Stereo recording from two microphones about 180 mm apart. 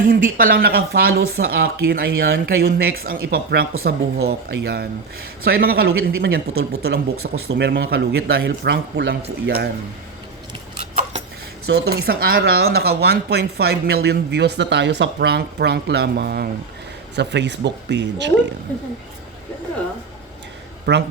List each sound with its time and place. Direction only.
0.0 s speech: 50° right (ahead or behind)
11.7 s speech: 65° right (ahead or behind)
17.2 s speech: 75° right (ahead or behind)
20.9 s speech: 75° right (ahead or behind)